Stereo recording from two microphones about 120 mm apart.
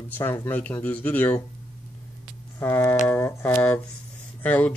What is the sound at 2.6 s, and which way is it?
Speech, 15° left (ahead or behind).